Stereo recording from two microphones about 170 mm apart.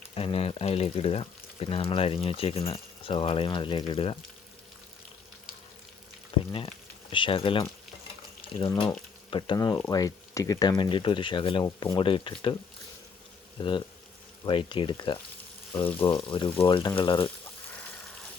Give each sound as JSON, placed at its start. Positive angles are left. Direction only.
{"t": 0.1, "sound": "speech", "side_deg": 35}
{"t": 6.3, "sound": "frying", "side_deg": 30}
{"t": 7.1, "sound": "speech", "side_deg": 30}
{"t": 13.6, "sound": "speech", "side_deg": 30}
{"t": 15.8, "sound": "speech", "side_deg": 10}
{"t": 16.0, "sound": "speech", "side_deg": 30}